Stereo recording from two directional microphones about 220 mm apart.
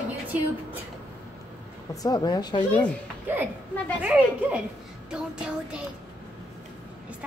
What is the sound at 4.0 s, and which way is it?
Speech, 5° right (ahead or behind).